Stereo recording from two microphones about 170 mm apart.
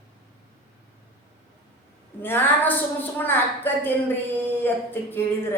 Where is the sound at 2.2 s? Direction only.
10° left (ahead or behind).